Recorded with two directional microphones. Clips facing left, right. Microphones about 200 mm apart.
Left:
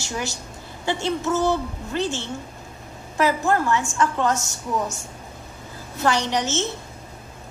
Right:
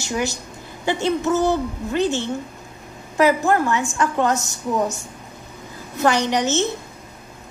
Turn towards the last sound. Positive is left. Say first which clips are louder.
# right 4 dB
turn(degrees=-15)  # may be behind; listen again after turning